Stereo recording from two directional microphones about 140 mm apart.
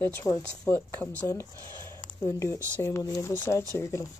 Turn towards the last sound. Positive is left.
turn(degrees=20)  # may be behind; listen again after turning